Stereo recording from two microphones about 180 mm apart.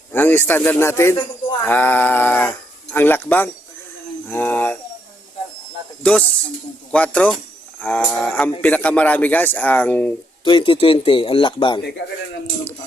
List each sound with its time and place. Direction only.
0.1 s speech: 10° left (ahead or behind)
6.0 s speech: 5° left (ahead or behind)
10.4 s speech: 30° left (ahead or behind)